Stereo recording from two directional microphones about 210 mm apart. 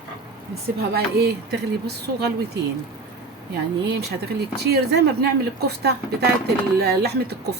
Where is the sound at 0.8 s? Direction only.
50° right (ahead or behind).